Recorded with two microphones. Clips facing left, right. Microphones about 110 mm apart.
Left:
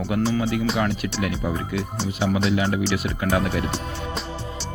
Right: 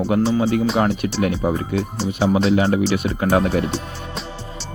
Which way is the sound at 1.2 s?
35° right (ahead or behind).